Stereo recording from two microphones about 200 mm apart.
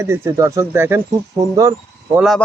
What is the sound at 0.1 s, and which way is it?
Speech, 15° right (ahead or behind).